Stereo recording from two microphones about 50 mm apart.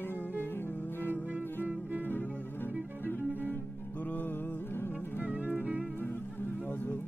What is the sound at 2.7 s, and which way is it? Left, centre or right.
Bowed string instrument, right.